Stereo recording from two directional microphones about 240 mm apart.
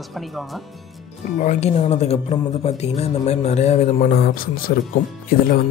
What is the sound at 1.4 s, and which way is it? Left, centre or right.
Speech, left.